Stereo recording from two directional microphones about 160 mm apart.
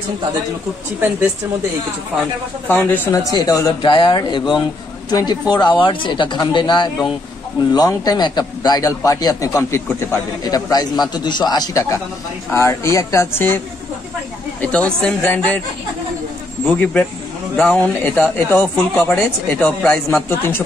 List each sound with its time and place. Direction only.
2.7 s a man's voice: 15° left (ahead or behind)
14.6 s speech: 5° left (ahead or behind)
16.6 s a man's voice: 10° left (ahead or behind)
18.0 s speech: 10° left (ahead or behind)